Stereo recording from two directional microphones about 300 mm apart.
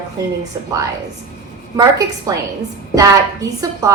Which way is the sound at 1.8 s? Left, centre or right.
Centre.